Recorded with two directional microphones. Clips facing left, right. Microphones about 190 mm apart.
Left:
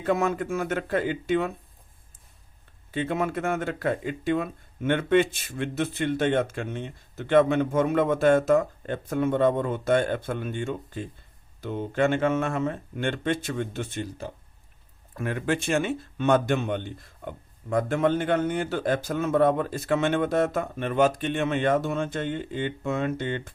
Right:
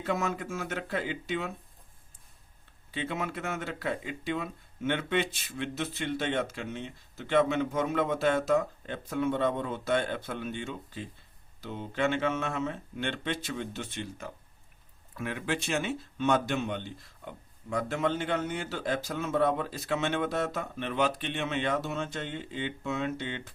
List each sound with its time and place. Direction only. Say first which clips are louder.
0.0 s speech: left 6 dB; 55° left (ahead or behind)
2.9 s speech: left 7 dB; 50° left (ahead or behind)
15.1 s speech: left 6 dB; 50° left (ahead or behind)